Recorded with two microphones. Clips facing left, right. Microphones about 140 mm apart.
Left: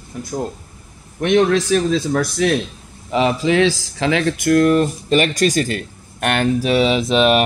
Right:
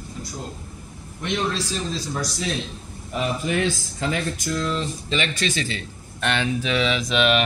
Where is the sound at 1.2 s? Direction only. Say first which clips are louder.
Left 11 dB; 65° left (ahead or behind).